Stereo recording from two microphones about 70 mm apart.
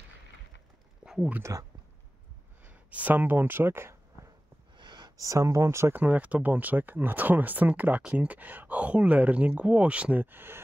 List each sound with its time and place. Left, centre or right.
1.0 s a sound: centre
1.4 s speech: right
2.6 s speech: right
4.8 s a sound: right
5.1 s speech: right
5.9 s speech: right
10.2 s speech: right